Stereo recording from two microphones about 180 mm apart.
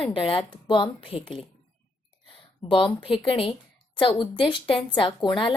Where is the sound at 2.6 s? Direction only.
30° left (ahead or behind).